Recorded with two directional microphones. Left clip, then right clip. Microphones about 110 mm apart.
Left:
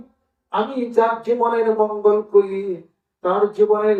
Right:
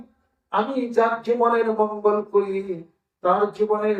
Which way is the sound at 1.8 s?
30° left (ahead or behind).